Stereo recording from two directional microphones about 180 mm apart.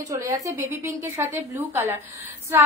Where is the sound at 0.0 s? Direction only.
20° right (ahead or behind).